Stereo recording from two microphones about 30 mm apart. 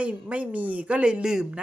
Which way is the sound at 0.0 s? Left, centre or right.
Right.